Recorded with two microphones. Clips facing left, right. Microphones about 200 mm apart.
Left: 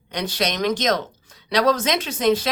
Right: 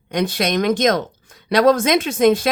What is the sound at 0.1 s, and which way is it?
Speech, 50° right (ahead or behind).